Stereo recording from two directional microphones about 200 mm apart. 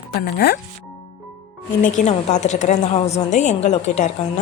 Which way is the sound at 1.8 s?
35° left (ahead or behind).